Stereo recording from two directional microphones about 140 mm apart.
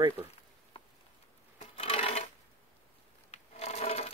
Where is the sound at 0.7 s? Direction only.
40° left (ahead or behind).